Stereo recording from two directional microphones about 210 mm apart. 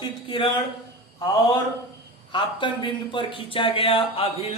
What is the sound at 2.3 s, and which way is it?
Speech, 25° left (ahead or behind).